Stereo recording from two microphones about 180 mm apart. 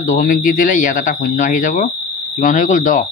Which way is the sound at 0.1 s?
50° left (ahead or behind).